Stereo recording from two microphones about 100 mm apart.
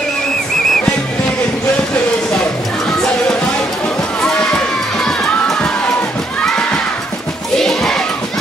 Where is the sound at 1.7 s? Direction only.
15° left (ahead or behind).